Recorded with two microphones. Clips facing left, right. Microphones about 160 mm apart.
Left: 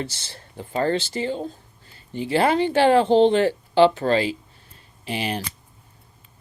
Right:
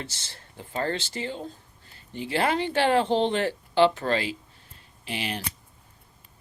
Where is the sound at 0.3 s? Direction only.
35° left (ahead or behind).